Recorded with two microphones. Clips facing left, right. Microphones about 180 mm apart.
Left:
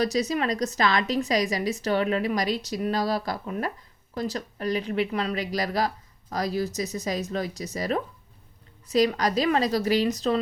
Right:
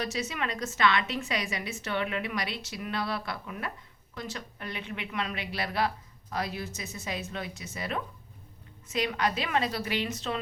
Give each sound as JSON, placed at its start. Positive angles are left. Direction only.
{"t": 0.0, "sound": "a woman's voice", "side_deg": 35}